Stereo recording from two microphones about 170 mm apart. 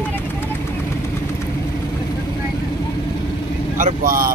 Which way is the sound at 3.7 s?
55° right (ahead or behind).